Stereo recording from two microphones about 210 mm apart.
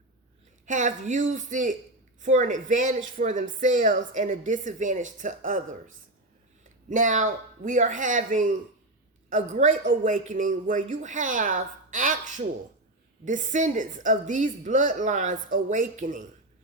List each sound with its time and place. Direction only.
0.6 s a woman's voice: 35° right (ahead or behind)
6.9 s a woman's voice: 35° right (ahead or behind)
13.2 s a woman's voice: 35° right (ahead or behind)